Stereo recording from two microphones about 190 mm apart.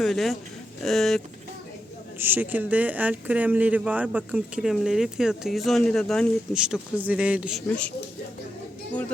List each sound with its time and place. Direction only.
0.0 s speech: centre (ahead or behind)
2.1 s speech: 10° right (ahead or behind)